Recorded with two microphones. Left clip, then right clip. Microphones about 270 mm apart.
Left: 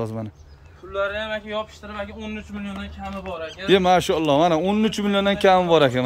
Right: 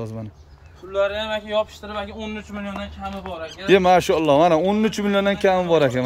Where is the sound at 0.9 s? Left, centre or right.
Right.